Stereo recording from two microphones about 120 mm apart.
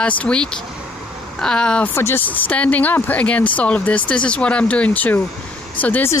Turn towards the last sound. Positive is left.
turn(degrees=15)  # may be behind; listen again after turning